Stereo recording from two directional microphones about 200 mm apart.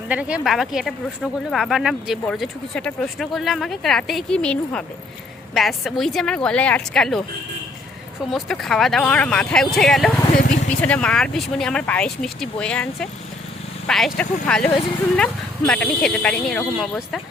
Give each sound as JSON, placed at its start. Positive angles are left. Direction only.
{"t": 0.1, "sound": "speech", "side_deg": -5}
{"t": 8.3, "sound": "speech", "side_deg": 0}
{"t": 10.3, "sound": "speech", "side_deg": 40}
{"t": 10.7, "sound": "speech", "side_deg": 5}